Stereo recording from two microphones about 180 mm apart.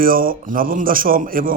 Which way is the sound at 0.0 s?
50° right (ahead or behind).